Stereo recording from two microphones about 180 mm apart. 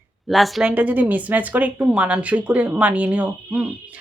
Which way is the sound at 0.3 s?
Centre (ahead or behind).